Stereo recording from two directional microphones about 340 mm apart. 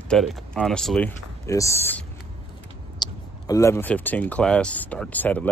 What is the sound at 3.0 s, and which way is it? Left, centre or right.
Speech, centre.